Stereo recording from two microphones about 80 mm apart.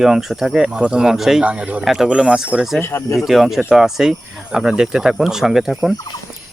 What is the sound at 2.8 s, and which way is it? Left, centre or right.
Speech, left.